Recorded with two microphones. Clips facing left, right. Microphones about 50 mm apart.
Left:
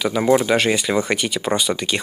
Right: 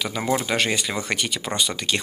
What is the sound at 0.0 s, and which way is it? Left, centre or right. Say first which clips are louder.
Speech: left 7 dB; centre.